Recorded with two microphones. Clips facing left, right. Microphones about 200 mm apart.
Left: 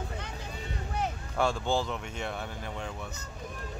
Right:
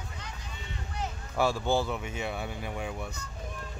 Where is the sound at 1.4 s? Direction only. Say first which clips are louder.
Right 1 dB; 5° right (ahead or behind).